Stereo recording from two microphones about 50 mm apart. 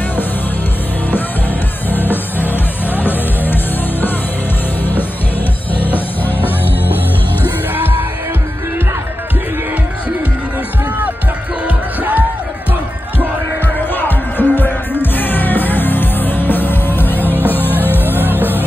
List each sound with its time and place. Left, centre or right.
1.9 s music: left
5.7 s music: left
7.4 s music: right
11.6 s music: right
13.9 s music: left